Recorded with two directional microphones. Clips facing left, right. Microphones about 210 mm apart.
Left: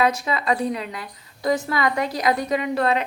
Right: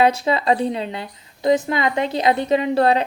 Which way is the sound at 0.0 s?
30° right (ahead or behind).